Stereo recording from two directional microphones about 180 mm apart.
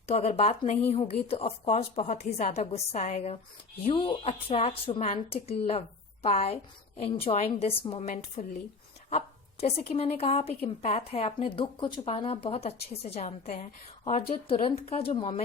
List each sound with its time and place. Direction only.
0.1 s a woman's voice: 35° left (ahead or behind)
3.8 s a woman's voice: 30° left (ahead or behind)
8.0 s a woman's voice: 45° left (ahead or behind)
9.0 s a woman's voice: 35° left (ahead or behind)